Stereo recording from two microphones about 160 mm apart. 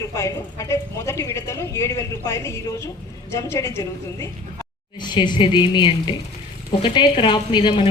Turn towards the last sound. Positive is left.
turn(degrees=30)  # may be behind; listen again after turning